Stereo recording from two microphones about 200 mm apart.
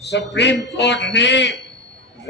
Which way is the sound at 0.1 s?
60° left (ahead or behind).